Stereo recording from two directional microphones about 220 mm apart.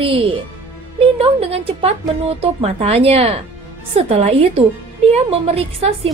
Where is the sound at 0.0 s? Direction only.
25° right (ahead or behind).